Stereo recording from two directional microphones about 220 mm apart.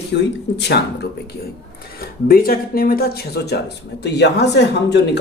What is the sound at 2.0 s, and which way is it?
Speech, 40° left (ahead or behind).